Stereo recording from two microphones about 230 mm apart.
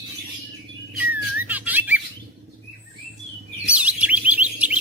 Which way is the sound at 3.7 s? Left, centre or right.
Centre.